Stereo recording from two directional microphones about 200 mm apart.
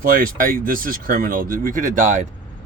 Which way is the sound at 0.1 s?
45° right (ahead or behind).